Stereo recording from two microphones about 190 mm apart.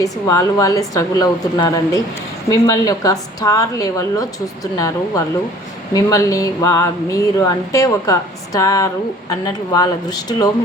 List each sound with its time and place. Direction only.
0.0 s a woman's voice: 15° left (ahead or behind)